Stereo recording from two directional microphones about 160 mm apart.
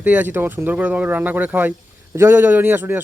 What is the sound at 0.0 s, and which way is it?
Speech, 10° right (ahead or behind).